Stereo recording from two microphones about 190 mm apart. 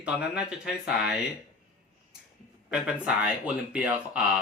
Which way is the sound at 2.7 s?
5° right (ahead or behind).